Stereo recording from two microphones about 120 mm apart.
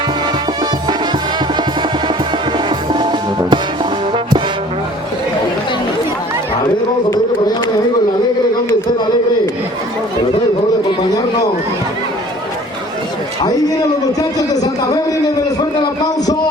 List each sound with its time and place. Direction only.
2.6 s music: 40° right (ahead or behind)
4.1 s brass instrument: 40° right (ahead or behind)
14.2 s a man's voice: 30° left (ahead or behind)
15.8 s a sound: 35° left (ahead or behind)